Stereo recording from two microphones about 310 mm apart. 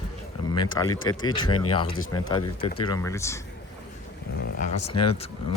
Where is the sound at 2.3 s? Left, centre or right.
Centre.